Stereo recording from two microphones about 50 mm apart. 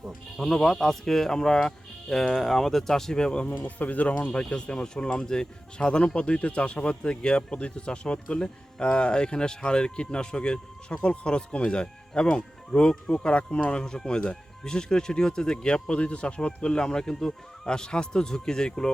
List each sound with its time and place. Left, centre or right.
0.1 s speech: centre
3.6 s speech: left; by 18.9 s centre